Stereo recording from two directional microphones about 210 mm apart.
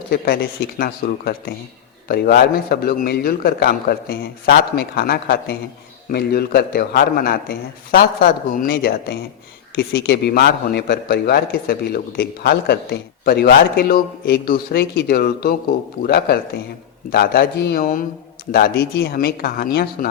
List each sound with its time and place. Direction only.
0.8 s a man's voice: 45° left (ahead or behind)